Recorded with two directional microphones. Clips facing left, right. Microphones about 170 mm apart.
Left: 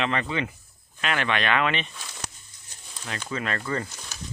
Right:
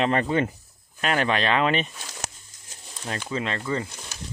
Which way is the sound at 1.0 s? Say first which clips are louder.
Right 3 dB; 40° right (ahead or behind).